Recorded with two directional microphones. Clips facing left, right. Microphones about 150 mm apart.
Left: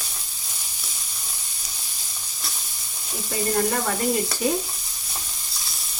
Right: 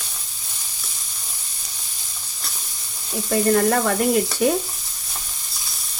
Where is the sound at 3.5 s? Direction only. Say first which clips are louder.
Right 3 dB; 65° right (ahead or behind).